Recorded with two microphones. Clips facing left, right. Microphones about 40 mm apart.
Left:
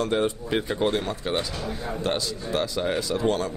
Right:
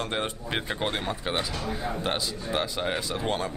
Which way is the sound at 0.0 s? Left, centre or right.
Right.